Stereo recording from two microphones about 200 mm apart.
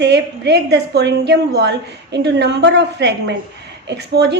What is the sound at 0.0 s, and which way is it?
A woman's voice, 55° right (ahead or behind).